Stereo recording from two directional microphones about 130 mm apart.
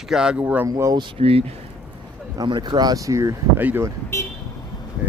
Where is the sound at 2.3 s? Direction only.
35° right (ahead or behind); by 3.9 s 15° right (ahead or behind).